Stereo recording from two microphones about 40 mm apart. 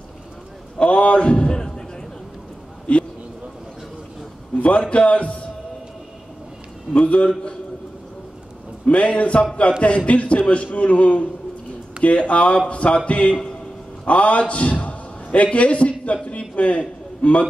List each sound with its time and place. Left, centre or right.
0.7 s a man's voice: left
2.9 s a sound: left
4.6 s a man's voice: left
6.9 s a man's voice: left
8.8 s a man's voice: left